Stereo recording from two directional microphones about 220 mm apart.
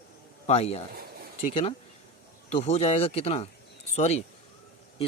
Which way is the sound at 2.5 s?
30° left (ahead or behind).